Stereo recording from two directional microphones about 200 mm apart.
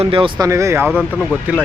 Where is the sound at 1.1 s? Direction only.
5° left (ahead or behind).